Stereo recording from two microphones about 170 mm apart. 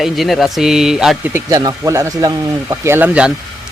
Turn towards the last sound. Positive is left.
turn(degrees=-5)  # may be behind; listen again after turning